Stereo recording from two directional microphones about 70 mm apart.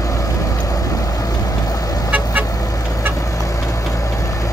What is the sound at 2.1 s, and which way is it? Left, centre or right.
Vehicle, right.